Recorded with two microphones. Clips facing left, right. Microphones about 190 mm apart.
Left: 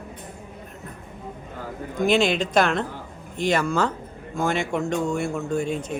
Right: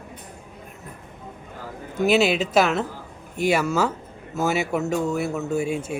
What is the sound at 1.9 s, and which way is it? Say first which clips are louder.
Speech: right 1 dB; 5° right (ahead or behind).